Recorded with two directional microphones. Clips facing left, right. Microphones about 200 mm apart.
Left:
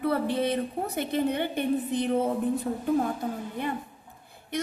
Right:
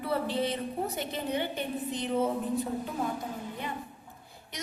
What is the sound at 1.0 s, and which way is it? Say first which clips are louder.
A woman's voice: left 10 dB; 55° left (ahead or behind).